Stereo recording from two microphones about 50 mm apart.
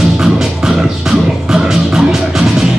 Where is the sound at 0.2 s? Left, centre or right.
Centre.